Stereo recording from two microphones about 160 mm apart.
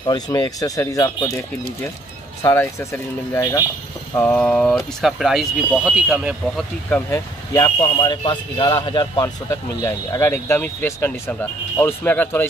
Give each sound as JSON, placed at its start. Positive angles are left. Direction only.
{"t": 0.0, "sound": "speech", "side_deg": 25}
{"t": 2.4, "sound": "speech", "side_deg": 15}
{"t": 6.9, "sound": "speech", "side_deg": 20}